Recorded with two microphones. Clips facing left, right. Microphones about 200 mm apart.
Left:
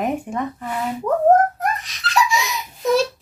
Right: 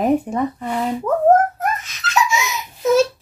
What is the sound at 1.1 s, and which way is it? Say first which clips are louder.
Speech: left 1 dB; 15° left (ahead or behind).